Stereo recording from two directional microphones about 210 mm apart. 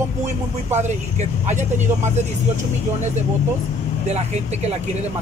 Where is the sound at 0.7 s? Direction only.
35° right (ahead or behind).